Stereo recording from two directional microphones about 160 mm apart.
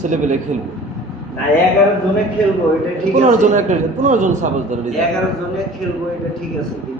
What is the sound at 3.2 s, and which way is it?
A man's voice, 50° right (ahead or behind).